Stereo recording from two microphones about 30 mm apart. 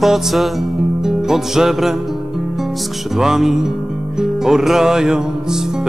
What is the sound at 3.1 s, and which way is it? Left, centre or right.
Music, centre.